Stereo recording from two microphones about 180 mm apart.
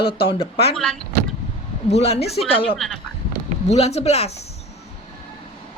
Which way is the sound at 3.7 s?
35° left (ahead or behind).